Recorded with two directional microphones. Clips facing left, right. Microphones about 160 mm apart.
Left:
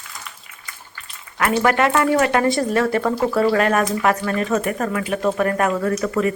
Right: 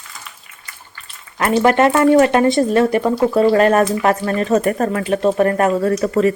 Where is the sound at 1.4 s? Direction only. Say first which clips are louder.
Right 4 dB; 25° right (ahead or behind).